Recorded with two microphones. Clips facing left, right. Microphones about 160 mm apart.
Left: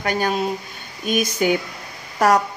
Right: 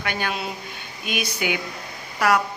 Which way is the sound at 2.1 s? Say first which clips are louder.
Left 4 dB; 40° left (ahead or behind).